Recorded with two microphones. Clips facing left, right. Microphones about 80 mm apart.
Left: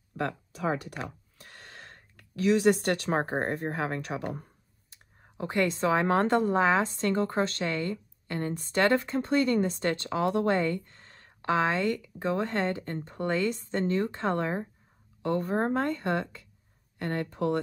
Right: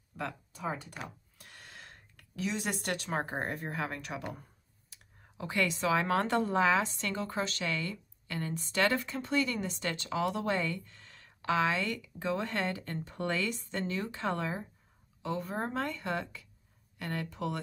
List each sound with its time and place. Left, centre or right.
0.2 s speech: left
0.6 s speech: left
0.9 s speech: left
5.4 s a woman's voice: left
15.2 s a woman's voice: left